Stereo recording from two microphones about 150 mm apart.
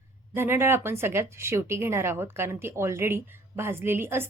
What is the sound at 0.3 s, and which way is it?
A woman's voice, 15° right (ahead or behind).